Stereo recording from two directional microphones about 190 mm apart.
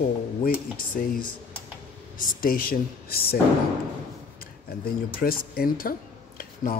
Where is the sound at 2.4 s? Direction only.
50° left (ahead or behind).